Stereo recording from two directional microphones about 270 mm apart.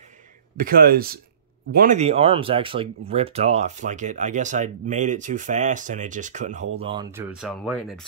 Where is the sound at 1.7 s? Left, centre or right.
Right.